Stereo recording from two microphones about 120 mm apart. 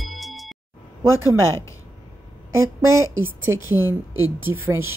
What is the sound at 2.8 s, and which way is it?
Speech, 25° right (ahead or behind).